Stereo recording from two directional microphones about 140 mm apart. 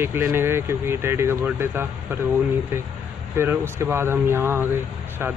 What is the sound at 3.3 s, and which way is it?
Speech, 15° right (ahead or behind).